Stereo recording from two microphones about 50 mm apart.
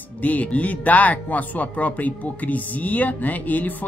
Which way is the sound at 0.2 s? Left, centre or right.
Left.